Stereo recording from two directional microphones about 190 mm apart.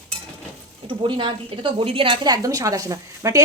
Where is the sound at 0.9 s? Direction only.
25° right (ahead or behind).